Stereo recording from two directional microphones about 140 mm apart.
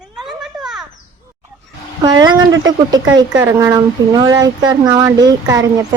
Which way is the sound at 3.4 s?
15° right (ahead or behind).